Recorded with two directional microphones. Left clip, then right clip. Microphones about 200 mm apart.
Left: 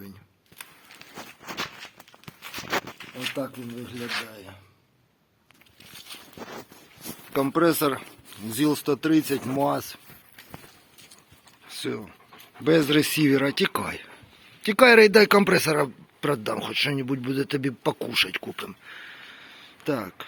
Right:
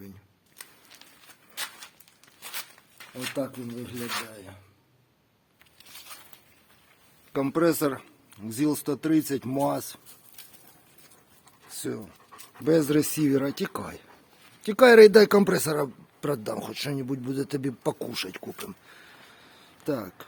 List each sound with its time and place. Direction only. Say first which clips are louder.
3.2 s speech: left 1 dB; centre (ahead or behind)
7.3 s speech: left 2 dB; centre (ahead or behind)
11.7 s speech: left 3 dB; centre (ahead or behind)
18.9 s a sound: left 8 dB; centre (ahead or behind)